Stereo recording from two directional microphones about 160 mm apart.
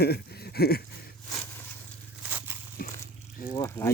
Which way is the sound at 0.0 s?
85° left.